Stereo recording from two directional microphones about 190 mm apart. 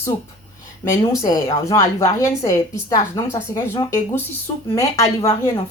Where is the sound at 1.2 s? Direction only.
20° left (ahead or behind).